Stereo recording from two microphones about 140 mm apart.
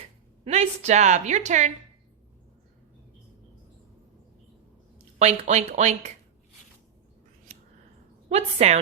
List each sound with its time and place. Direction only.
0.4 s a woman's voice: 50° right (ahead or behind)
5.2 s speech: 55° right (ahead or behind)
8.3 s speech: 50° right (ahead or behind)